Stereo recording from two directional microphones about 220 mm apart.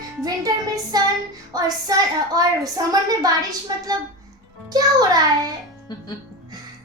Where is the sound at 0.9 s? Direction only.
20° right (ahead or behind).